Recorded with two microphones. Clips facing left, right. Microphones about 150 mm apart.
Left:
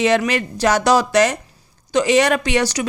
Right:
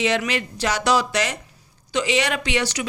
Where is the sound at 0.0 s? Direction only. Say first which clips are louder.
Left 5 dB; 45° left (ahead or behind).